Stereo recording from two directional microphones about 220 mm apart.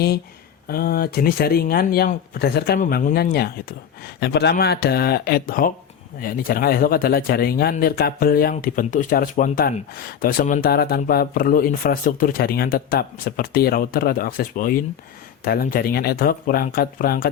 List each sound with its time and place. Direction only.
0.7 s speech: 45° left (ahead or behind)